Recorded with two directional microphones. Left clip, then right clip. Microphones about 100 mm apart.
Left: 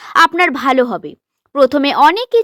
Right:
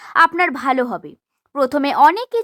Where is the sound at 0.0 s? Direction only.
35° left (ahead or behind).